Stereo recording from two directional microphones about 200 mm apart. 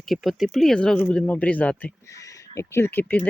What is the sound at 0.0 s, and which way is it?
Speech, centre (ahead or behind).